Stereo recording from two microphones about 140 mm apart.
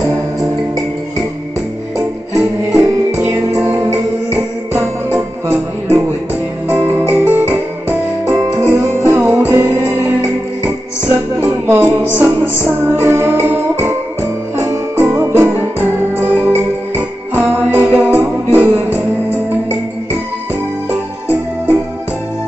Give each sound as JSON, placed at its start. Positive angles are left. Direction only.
{"t": 2.0, "sound": "music", "side_deg": -10}
{"t": 3.3, "sound": "music", "side_deg": -20}
{"t": 6.7, "sound": "music", "side_deg": -15}
{"t": 20.9, "sound": "music", "side_deg": -10}